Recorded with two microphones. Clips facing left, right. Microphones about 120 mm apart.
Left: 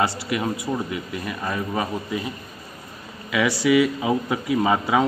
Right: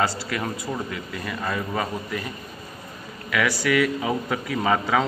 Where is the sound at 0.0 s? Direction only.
15° left (ahead or behind).